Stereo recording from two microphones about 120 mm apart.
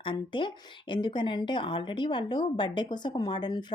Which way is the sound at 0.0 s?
45° left (ahead or behind).